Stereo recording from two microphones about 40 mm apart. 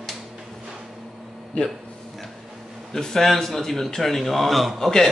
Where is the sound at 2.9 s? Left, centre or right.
Centre.